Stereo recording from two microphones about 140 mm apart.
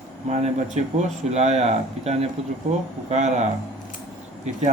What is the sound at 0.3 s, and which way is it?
Speech, 50° right (ahead or behind).